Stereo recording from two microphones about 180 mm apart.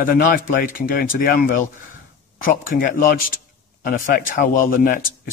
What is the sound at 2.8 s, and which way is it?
Speech, 50° left (ahead or behind).